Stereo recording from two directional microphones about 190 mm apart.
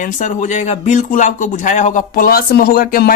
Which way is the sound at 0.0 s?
40° left (ahead or behind).